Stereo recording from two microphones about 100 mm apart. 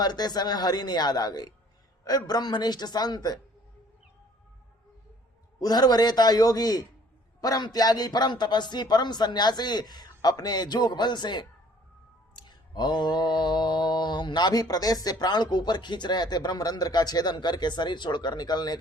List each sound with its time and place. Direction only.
0.0 s mantra: 45° left (ahead or behind)
5.5 s a man's voice: 40° left (ahead or behind)
7.4 s mantra: 40° left (ahead or behind)